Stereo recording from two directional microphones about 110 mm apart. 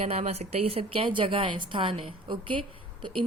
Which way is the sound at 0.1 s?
70° right (ahead or behind).